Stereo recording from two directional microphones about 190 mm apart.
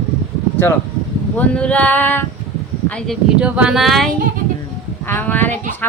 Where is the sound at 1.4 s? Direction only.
5° left (ahead or behind).